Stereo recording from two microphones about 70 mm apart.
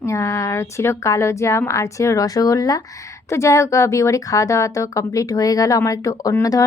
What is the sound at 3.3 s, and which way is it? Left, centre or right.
Speech, left.